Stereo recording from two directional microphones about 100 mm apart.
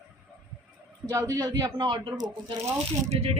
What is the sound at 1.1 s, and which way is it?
A man's voice, 35° right (ahead or behind).